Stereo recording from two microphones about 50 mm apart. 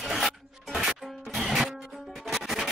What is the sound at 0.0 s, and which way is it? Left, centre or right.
Music, centre.